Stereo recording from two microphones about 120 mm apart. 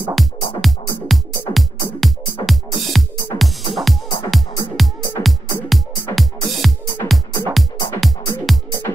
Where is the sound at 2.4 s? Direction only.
Centre (ahead or behind).